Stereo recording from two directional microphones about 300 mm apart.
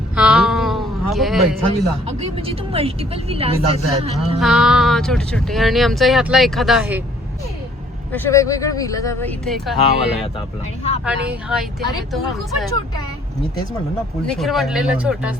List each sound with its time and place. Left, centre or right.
0.2 s a sound: centre
2.0 s speech: centre
4.4 s speech: centre
8.1 s speech: centre
14.3 s speech: centre